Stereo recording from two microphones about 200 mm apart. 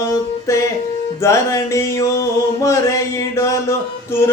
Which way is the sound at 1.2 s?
15° left (ahead or behind).